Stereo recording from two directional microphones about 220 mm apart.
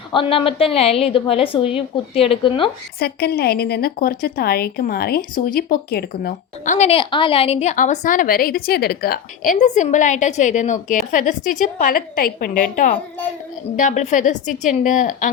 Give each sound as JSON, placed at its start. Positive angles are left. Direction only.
{"t": 0.1, "sound": "a woman's voice", "side_deg": 25}
{"t": 3.0, "sound": "a woman's voice", "side_deg": 45}